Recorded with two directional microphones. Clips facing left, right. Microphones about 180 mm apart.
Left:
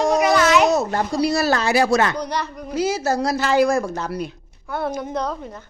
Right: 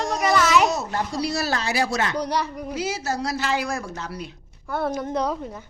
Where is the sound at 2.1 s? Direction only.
10° right (ahead or behind).